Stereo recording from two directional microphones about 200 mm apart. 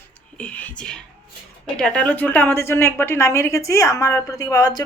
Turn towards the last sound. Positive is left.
turn(degrees=20)  # may be behind; listen again after turning